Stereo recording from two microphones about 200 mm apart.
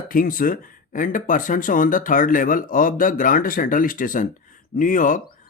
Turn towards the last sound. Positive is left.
turn(degrees=40)  # may be behind; listen again after turning